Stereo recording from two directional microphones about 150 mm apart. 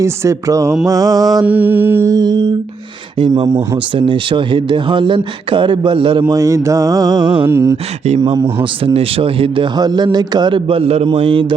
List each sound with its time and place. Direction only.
0.0 s a sound: 20° right (ahead or behind)
1.5 s mantra: 10° right (ahead or behind); by 2.5 s 25° right (ahead or behind)
3.2 s speech: 30° right (ahead or behind)
7.4 s a sound: 20° right (ahead or behind)
8.4 s mantra: 15° right (ahead or behind)
8.8 s speech: 40° right (ahead or behind)